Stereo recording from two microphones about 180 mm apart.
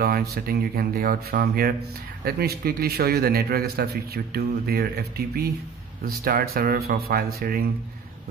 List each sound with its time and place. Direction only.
0.0 s a man's voice: 60° right (ahead or behind)